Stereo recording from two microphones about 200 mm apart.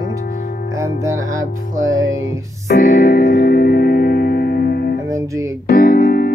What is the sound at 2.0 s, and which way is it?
Music, 75° right (ahead or behind).